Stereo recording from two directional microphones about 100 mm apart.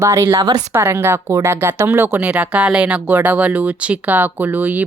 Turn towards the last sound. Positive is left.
turn(degrees=-15)  # may be behind; listen again after turning